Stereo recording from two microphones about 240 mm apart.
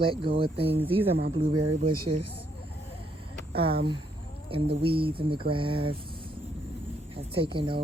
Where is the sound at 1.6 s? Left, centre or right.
Right.